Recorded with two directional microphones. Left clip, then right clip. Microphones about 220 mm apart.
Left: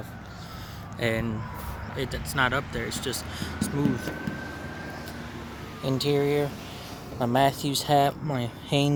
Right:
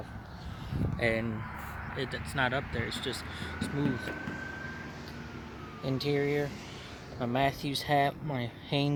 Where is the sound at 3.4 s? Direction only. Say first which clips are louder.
Left 4 dB; 20° left (ahead or behind).